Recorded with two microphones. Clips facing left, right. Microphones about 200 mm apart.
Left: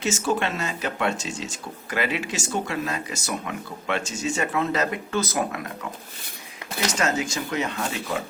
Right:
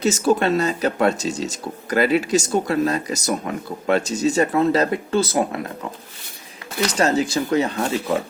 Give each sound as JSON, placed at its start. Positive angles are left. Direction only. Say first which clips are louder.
{"t": 0.0, "sound": "speech", "louder": "right 7 dB", "side_deg": -40}
{"t": 6.9, "sound": "speech", "louder": "right 7 dB", "side_deg": -35}